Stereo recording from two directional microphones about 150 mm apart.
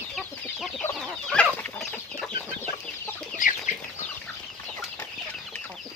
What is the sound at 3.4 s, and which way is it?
Chicken, 60° left (ahead or behind).